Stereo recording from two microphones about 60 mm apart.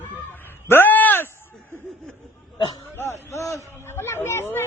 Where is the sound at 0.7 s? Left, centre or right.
Left.